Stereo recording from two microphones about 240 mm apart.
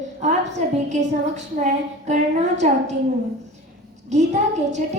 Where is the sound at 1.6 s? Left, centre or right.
Right.